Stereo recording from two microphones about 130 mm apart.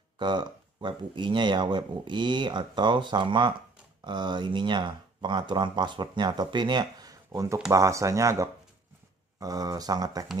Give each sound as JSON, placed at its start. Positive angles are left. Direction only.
{"t": 0.2, "sound": "speech", "side_deg": -35}